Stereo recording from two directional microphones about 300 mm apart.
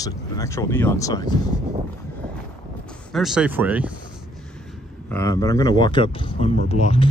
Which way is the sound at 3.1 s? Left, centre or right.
Centre.